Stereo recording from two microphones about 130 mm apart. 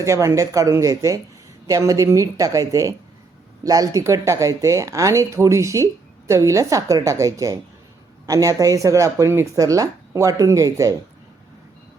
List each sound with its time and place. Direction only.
0.0 s speech: 25° right (ahead or behind)